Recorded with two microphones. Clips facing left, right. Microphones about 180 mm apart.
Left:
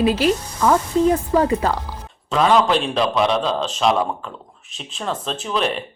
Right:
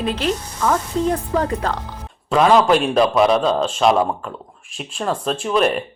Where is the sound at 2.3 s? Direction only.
10° right (ahead or behind).